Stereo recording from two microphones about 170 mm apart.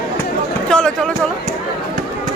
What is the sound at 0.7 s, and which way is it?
Speech, 5° left (ahead or behind).